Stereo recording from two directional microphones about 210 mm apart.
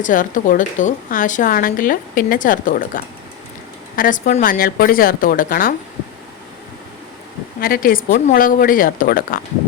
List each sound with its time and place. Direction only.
0.0 s a woman's voice: 40° left (ahead or behind)
7.6 s a woman's voice: 45° left (ahead or behind)